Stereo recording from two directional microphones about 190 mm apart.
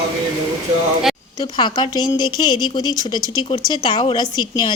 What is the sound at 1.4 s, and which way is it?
Speech, 25° left (ahead or behind).